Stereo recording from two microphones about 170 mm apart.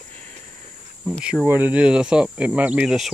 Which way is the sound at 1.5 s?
10° right (ahead or behind).